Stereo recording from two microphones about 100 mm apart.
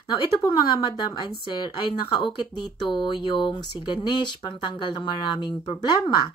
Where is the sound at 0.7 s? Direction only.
55° left (ahead or behind).